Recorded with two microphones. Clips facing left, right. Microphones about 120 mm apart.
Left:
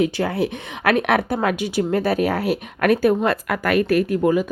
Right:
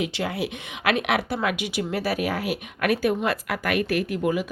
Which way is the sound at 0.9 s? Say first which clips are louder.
Left 5 dB; 55° left (ahead or behind).